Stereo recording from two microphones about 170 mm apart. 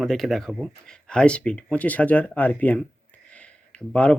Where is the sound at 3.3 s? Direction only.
5° left (ahead or behind).